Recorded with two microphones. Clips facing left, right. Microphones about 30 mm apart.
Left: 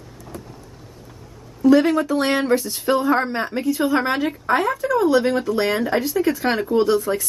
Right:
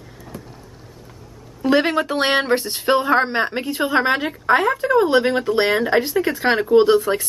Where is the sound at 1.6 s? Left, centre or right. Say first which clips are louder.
Left 2 dB; right.